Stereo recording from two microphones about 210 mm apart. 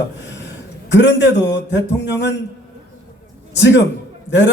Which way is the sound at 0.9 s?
60° left (ahead or behind).